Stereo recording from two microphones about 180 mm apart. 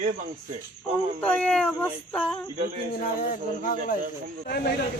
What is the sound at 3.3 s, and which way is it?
Speech, 50° left (ahead or behind).